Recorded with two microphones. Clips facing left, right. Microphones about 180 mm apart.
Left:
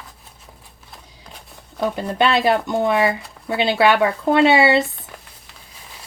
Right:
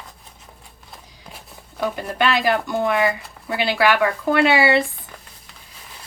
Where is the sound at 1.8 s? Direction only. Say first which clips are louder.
Left 3 dB; 25° left (ahead or behind).